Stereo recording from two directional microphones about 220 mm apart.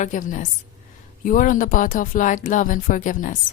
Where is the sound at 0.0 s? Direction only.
35° left (ahead or behind).